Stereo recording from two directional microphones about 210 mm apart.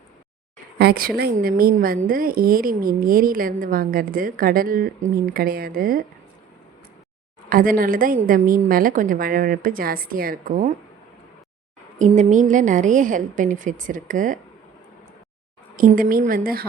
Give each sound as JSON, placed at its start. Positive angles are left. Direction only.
{"t": 0.8, "sound": "a woman's voice", "side_deg": -45}
{"t": 7.5, "sound": "a woman's voice", "side_deg": -40}
{"t": 11.9, "sound": "a woman's voice", "side_deg": -35}
{"t": 15.7, "sound": "a woman's voice", "side_deg": -40}